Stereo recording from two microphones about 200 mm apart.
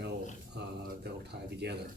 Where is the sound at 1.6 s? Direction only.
55° right (ahead or behind).